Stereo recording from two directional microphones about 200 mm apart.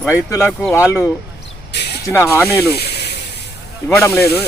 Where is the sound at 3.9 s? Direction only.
10° left (ahead or behind).